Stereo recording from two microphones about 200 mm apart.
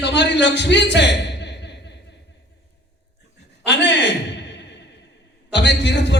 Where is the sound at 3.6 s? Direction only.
60° left (ahead or behind).